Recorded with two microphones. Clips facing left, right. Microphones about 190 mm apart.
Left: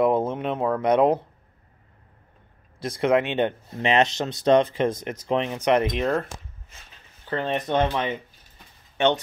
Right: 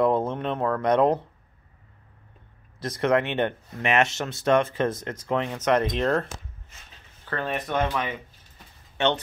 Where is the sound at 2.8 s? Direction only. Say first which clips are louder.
Left 2 dB; 10° left (ahead or behind).